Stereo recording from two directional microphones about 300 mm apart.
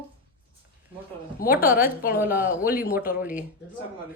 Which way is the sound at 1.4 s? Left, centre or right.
Centre.